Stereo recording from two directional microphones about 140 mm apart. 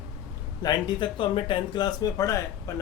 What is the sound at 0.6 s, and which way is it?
Speech, 35° left (ahead or behind).